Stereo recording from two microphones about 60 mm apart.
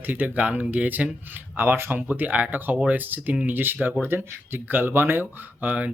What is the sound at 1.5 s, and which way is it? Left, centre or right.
Speech, right.